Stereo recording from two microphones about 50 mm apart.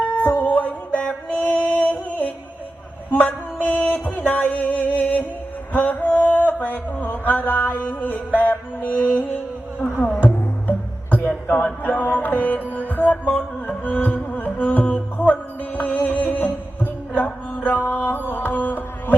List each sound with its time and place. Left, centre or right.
0.0 s music: left
3.6 s a sound: left
3.9 s music: left